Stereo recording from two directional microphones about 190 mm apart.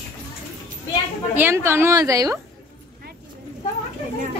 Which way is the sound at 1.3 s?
10° right (ahead or behind).